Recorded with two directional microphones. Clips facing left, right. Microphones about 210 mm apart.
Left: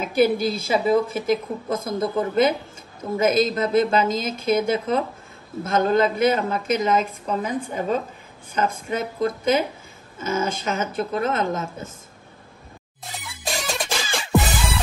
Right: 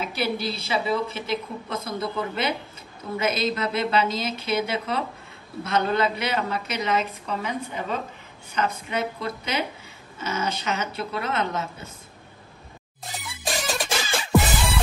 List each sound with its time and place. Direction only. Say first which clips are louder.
0.0 s a woman's voice: left 8 dB; 50° left (ahead or behind)
13.2 s music: even; centre (ahead or behind)